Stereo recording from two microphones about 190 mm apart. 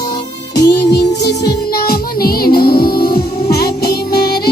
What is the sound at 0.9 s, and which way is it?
Music, 60° left (ahead or behind).